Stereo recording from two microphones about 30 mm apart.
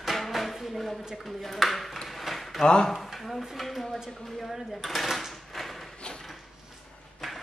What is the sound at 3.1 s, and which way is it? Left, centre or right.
Dishes, centre.